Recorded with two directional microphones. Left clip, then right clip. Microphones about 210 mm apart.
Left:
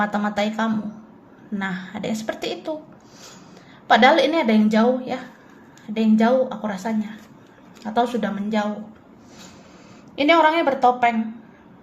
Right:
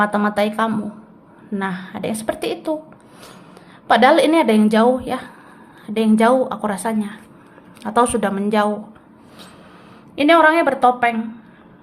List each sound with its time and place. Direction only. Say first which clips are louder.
0.0 s a woman's voice: right 5 dB; 15° right (ahead or behind)
3.8 s a woman's voice: right 2 dB; 10° right (ahead or behind)
10.2 s a woman's voice: right 4 dB; 15° right (ahead or behind)